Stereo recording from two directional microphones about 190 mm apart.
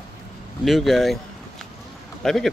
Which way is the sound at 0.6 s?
Centre (ahead or behind).